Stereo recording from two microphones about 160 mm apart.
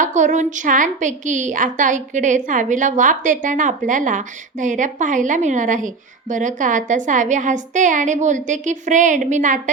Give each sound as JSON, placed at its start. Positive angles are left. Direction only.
{"t": 0.0, "sound": "a woman's voice", "side_deg": -50}